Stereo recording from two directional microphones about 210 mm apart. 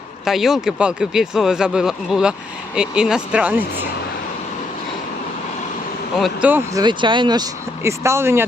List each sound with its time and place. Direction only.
0.3 s speech: centre (ahead or behind)
6.1 s speech: 5° right (ahead or behind)
6.7 s speech: 20° right (ahead or behind)